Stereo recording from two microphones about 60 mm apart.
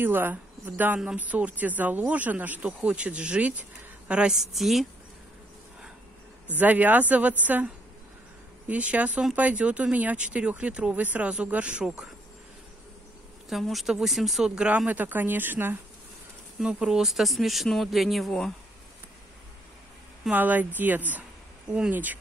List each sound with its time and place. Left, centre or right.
0.0 s speech: right
4.3 s speech: centre
6.6 s speech: right
8.6 s speech: right
13.5 s speech: centre
14.5 s speech: centre
14.9 s speech: right
16.5 s speech: centre
20.2 s speech: right